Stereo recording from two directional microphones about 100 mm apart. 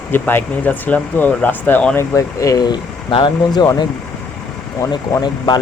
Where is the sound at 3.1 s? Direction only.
50° left (ahead or behind).